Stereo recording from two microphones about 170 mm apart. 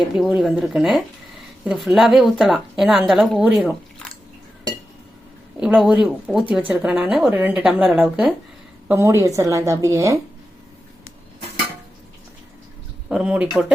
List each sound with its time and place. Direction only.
0.1 s speech: 5° right (ahead or behind)
5.5 s speech: centre (ahead or behind)
8.9 s a woman's voice: 15° right (ahead or behind)
13.1 s speech: 5° right (ahead or behind)